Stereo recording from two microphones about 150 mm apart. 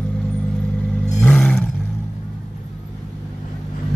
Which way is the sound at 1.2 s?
5° left (ahead or behind).